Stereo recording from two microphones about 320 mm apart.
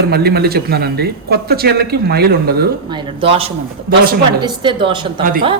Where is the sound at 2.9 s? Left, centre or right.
Centre.